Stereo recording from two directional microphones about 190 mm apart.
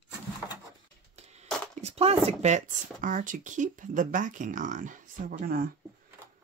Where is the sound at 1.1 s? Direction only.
35° right (ahead or behind).